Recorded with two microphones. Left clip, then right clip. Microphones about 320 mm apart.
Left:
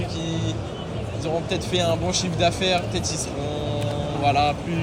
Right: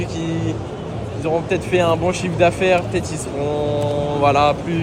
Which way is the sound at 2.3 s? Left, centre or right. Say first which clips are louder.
Right 7 dB; right.